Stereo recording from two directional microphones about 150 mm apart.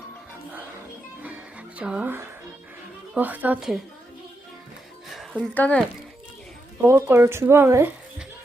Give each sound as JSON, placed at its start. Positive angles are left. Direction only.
{"t": 1.2, "sound": "music", "side_deg": -10}
{"t": 3.2, "sound": "speech", "side_deg": -10}
{"t": 5.1, "sound": "music", "side_deg": -5}
{"t": 5.5, "sound": "speech", "side_deg": 10}
{"t": 6.8, "sound": "speech", "side_deg": -15}